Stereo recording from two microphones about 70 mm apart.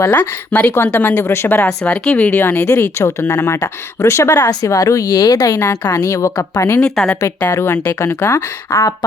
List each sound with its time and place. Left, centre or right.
0.1 s speech: left
1.5 s speech: centre
2.8 s a woman's voice: left
5.5 s speech: left
5.9 s a woman's voice: left
6.7 s a woman's voice: centre
7.6 s speech: left